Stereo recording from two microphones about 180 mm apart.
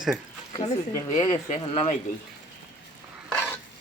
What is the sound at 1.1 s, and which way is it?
Speech, 35° left (ahead or behind).